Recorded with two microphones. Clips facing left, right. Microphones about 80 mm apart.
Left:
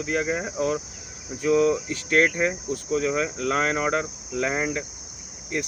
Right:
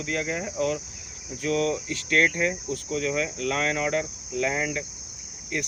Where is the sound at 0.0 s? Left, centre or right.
Left.